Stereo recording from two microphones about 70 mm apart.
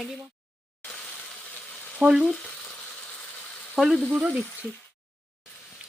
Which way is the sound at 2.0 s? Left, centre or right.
Centre.